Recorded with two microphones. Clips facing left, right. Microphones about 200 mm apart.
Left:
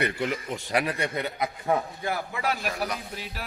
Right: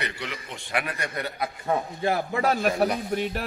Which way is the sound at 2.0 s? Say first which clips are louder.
Right 6 dB; 30° right (ahead or behind).